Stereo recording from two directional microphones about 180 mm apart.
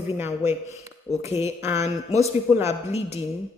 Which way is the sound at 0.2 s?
15° right (ahead or behind).